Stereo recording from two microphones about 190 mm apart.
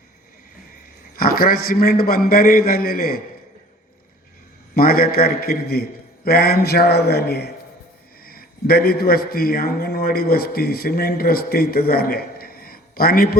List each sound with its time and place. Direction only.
1.1 s a man's voice: 50° left (ahead or behind)
4.7 s a man's voice: 50° left (ahead or behind)